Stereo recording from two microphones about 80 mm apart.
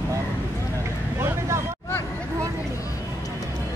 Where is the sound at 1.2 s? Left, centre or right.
Right.